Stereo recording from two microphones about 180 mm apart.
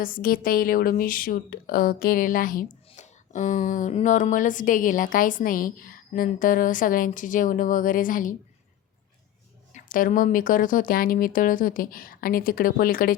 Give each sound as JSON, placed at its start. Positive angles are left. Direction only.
{"t": 0.0, "sound": "a woman's voice", "side_deg": 55}
{"t": 9.7, "sound": "a woman's voice", "side_deg": 45}